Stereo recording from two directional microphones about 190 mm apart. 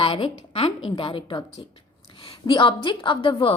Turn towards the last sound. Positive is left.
turn(degrees=25)  # may be behind; listen again after turning